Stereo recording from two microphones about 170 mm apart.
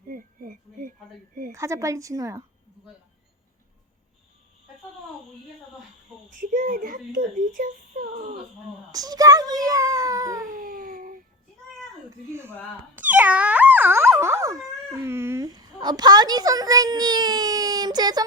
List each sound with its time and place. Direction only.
0.1 s a sound: 55° right (ahead or behind)
1.5 s speech: 15° right (ahead or behind)
6.4 s speech: 55° right (ahead or behind)
8.9 s speech: 20° right (ahead or behind)
10.6 s baby cry: 60° right (ahead or behind)
12.3 s speech: 15° right (ahead or behind)
13.0 s wail: 10° right (ahead or behind)
15.0 s a woman's voice: 15° right (ahead or behind)